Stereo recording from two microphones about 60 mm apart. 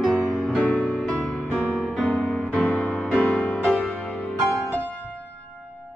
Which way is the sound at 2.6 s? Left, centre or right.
Left.